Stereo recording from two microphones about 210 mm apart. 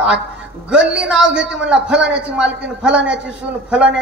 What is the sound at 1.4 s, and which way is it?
Speech, 60° right (ahead or behind).